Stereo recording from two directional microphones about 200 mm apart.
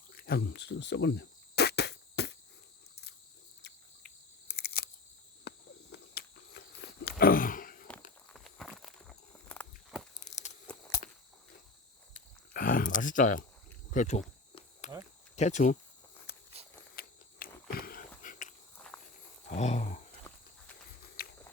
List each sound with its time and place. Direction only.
0.1 s cricket: 50° left (ahead or behind)
4.5 s a sound: 50° left (ahead or behind)
7.2 s a sound: 45° left (ahead or behind)
8.3 s walk: centre (ahead or behind)
10.2 s tearing: 35° left (ahead or behind)
12.1 s a sound: 45° left (ahead or behind)
13.9 s speech: 40° left (ahead or behind)
14.8 s cricket: 35° left (ahead or behind)
15.4 s speech: 35° left (ahead or behind)
16.9 s walk: 45° left (ahead or behind)
18.2 s biting: 40° left (ahead or behind)
19.5 s a sound: 35° left (ahead or behind)
21.2 s walk: 50° left (ahead or behind)